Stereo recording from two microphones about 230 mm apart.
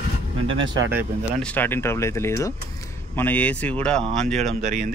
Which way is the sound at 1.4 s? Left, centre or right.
Centre.